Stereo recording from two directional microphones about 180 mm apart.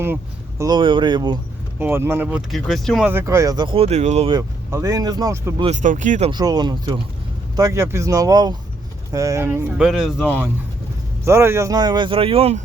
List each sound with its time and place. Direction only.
0.6 s speech: 25° right (ahead or behind)
1.8 s speech: 10° right (ahead or behind)
3.1 s speech: 15° right (ahead or behind); by 4.3 s 40° right (ahead or behind)
4.3 s speech: 20° right (ahead or behind)
5.6 s speech: 45° right (ahead or behind)
6.3 s speech: 20° right (ahead or behind); by 10.2 s centre (ahead or behind)
11.3 s speech: 15° right (ahead or behind); by 12.6 s 35° right (ahead or behind)